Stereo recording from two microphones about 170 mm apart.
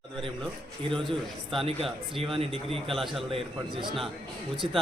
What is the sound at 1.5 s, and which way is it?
A man's voice, 35° right (ahead or behind).